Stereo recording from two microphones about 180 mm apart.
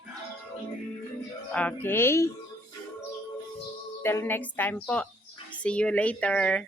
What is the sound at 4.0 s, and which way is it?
Speech, 15° left (ahead or behind).